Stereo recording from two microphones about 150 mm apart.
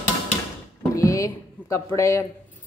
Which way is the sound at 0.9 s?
20° left (ahead or behind).